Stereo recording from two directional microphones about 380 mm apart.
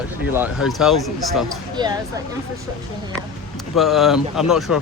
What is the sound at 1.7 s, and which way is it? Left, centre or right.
Speech, centre.